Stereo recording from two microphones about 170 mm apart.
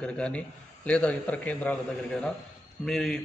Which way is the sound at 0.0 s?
5° left (ahead or behind).